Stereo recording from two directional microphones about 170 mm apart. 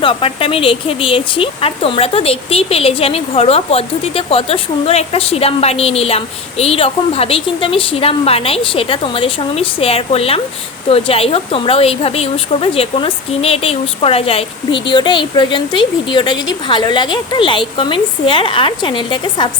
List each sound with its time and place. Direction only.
0.0 s a woman's voice: 30° left (ahead or behind)